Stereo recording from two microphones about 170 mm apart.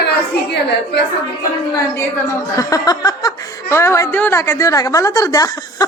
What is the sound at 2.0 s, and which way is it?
Speech, 20° left (ahead or behind).